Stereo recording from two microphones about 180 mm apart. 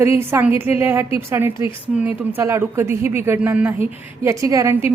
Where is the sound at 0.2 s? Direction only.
10° right (ahead or behind).